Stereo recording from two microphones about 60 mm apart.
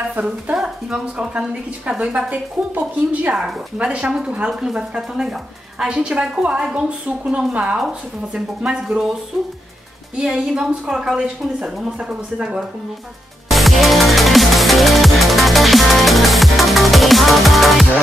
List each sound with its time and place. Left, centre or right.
0.1 s a woman's voice: right
3.8 s a woman's voice: centre
10.1 s a woman's voice: centre
13.5 s music: centre